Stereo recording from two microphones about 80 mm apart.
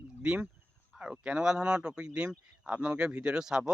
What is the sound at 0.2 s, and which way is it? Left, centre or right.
Speech, centre.